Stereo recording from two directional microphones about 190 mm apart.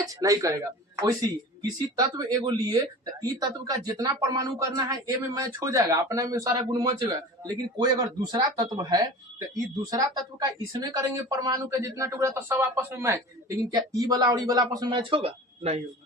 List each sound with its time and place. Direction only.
0.0 s speech: 20° right (ahead or behind)
1.6 s speech: 20° right (ahead or behind)